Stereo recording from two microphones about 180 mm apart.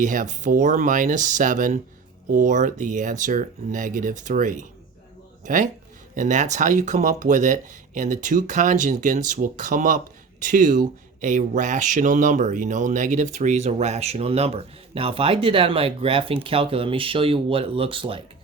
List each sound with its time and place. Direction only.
0.0 s speech: 45° right (ahead or behind); by 18.2 s 30° right (ahead or behind)